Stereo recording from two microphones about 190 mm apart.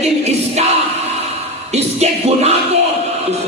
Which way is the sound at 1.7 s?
35° right (ahead or behind).